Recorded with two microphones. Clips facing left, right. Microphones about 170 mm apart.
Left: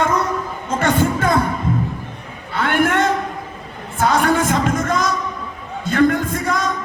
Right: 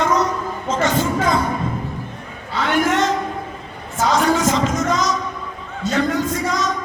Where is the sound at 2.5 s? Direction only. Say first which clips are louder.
Left 1 dB; 55° left (ahead or behind).